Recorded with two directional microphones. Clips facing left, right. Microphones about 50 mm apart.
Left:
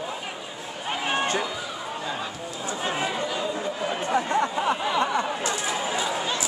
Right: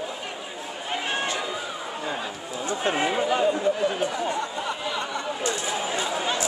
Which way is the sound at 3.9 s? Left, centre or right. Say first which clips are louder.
Left 2 dB; left.